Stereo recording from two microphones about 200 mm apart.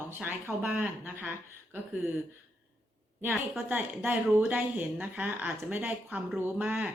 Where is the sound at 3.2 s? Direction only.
10° right (ahead or behind).